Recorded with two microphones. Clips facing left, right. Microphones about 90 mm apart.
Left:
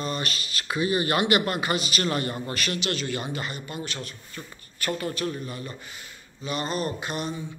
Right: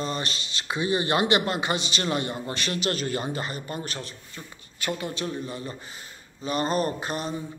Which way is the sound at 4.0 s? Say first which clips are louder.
Even; 20° right (ahead or behind).